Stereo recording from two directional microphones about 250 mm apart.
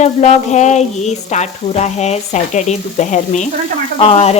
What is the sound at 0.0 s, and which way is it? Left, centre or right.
Frying, left.